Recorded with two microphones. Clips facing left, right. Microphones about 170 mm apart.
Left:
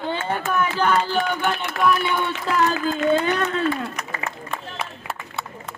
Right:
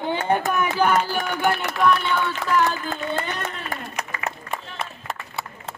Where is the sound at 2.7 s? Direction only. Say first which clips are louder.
Left 7 dB; 80° left.